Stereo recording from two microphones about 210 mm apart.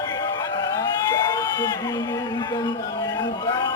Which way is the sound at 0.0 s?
20° left (ahead or behind).